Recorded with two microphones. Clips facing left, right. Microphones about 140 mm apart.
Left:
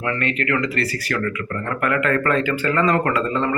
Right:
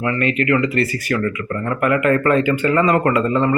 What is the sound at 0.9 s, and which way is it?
A man's voice, 20° right (ahead or behind).